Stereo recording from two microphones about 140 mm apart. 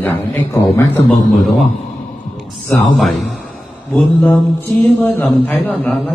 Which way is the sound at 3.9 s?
15° left (ahead or behind).